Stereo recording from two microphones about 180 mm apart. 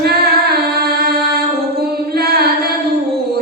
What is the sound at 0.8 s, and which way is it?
Music, 60° right (ahead or behind).